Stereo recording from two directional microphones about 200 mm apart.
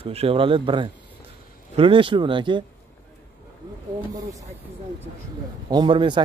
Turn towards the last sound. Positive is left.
turn(degrees=-25)  # may be behind; listen again after turning